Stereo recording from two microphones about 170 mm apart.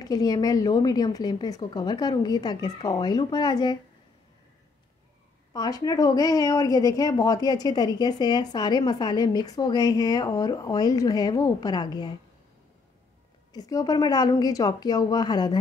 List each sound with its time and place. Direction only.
0.0 s speech: 25° left (ahead or behind)
5.5 s speech: 25° left (ahead or behind)
13.5 s speech: 20° left (ahead or behind)